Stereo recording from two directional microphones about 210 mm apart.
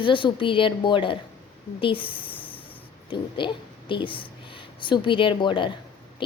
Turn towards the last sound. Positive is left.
turn(degrees=25)  # may be behind; listen again after turning